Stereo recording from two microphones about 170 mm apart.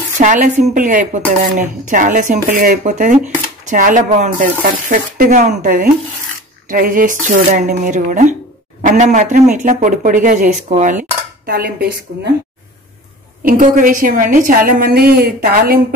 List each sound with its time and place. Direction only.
0.2 s speech: 45° right (ahead or behind); by 12.0 s 65° right (ahead or behind)
13.4 s a woman's voice: 50° right (ahead or behind)